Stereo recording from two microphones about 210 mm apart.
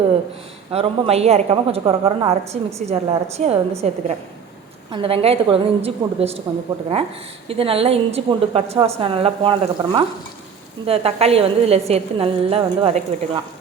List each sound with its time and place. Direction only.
0.7 s a woman's voice: 30° right (ahead or behind)
7.4 s a woman's voice: 25° right (ahead or behind)